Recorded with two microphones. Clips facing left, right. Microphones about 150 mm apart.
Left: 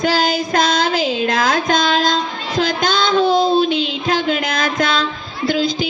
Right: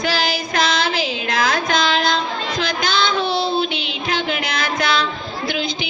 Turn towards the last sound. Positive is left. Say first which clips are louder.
# left 6 dB
turn(degrees=45)  # may be behind; listen again after turning